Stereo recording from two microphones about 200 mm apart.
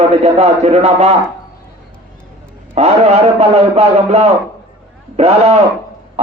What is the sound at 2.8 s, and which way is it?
A man's voice, 30° right (ahead or behind).